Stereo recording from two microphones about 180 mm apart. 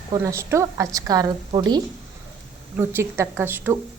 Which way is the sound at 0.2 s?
15° right (ahead or behind).